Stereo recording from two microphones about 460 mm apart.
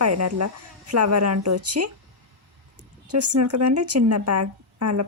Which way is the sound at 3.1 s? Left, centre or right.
Right.